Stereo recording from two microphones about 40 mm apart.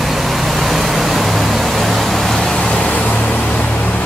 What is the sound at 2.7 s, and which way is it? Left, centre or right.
Vehicle, left.